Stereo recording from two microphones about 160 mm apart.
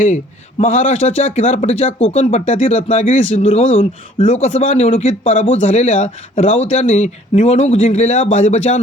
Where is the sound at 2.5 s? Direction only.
55° left (ahead or behind).